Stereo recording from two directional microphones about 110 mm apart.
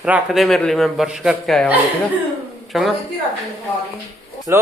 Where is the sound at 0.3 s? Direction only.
Centre (ahead or behind).